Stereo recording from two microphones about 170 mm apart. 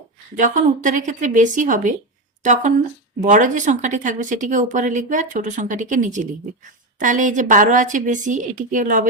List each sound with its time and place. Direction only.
0.3 s speech: 50° right (ahead or behind)